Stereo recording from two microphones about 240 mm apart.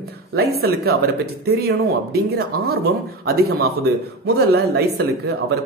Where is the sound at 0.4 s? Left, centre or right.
Right.